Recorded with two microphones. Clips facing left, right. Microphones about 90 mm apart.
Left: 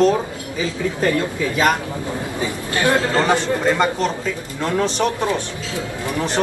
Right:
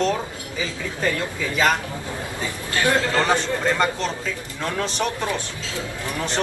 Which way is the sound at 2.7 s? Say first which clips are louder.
Left 3 dB; 20° left (ahead or behind).